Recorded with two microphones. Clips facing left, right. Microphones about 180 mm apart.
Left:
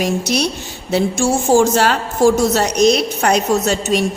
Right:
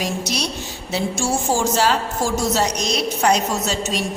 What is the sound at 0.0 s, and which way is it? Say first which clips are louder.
A woman's voice: left 7 dB; 55° left (ahead or behind).